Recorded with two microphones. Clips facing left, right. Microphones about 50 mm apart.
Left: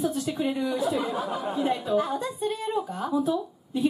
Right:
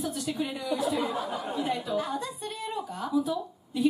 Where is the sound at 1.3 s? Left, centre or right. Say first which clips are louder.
Left 3 dB; centre.